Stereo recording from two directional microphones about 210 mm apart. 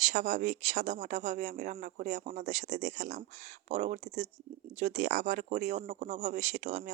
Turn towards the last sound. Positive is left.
turn(degrees=-35)  # may be behind; listen again after turning